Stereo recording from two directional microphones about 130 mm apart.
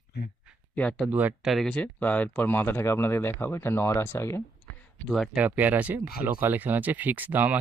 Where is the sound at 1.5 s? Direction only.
5° left (ahead or behind); by 4.4 s 20° left (ahead or behind).